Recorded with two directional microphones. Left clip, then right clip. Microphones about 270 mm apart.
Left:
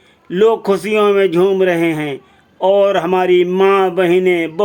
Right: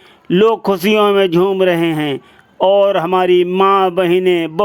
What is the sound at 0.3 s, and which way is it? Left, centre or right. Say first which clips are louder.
A man's voice: even; centre.